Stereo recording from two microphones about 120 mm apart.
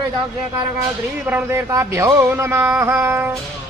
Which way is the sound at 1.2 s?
20° right (ahead or behind).